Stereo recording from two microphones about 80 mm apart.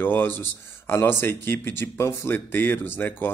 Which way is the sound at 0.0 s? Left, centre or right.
Left.